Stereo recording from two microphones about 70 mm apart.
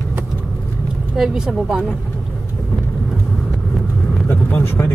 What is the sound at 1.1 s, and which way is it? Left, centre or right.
Speech, centre.